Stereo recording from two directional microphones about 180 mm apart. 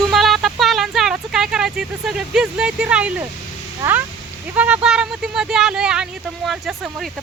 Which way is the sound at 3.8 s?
15° right (ahead or behind).